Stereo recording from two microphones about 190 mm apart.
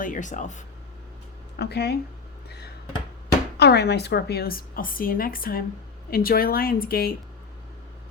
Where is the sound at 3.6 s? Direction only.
60° left (ahead or behind).